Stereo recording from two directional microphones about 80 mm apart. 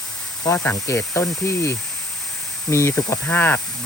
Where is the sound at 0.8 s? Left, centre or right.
Left.